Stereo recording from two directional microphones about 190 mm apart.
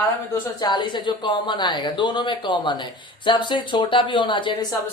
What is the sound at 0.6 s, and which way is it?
Speech, 25° left (ahead or behind).